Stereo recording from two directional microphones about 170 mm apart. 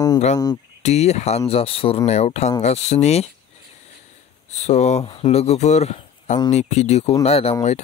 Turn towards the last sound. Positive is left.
turn(degrees=35)  # may be behind; listen again after turning